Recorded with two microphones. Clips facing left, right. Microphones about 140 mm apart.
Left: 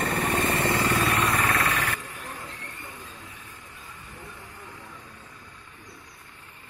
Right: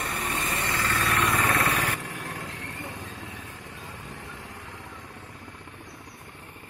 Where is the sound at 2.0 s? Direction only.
90° right.